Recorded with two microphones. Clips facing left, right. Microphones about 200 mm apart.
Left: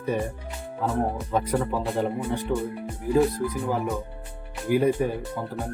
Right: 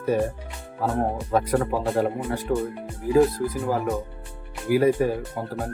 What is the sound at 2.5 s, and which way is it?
Speech, 45° right (ahead or behind).